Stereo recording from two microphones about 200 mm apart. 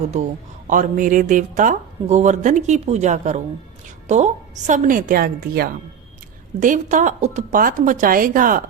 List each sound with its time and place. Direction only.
0.7 s speech: 40° right (ahead or behind)